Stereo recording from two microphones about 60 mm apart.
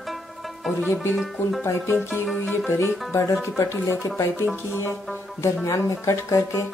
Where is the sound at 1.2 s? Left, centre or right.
Centre.